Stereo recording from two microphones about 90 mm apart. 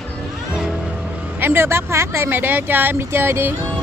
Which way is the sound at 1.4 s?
25° right (ahead or behind).